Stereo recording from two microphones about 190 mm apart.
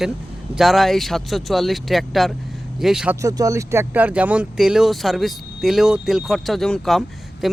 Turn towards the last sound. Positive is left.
turn(degrees=0)  # may be behind; listen again after turning